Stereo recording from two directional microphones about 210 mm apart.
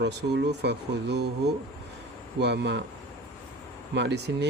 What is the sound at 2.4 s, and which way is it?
Speech, 55° right (ahead or behind).